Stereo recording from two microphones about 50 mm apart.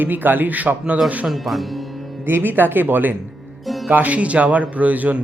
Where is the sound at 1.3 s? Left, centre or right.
Centre.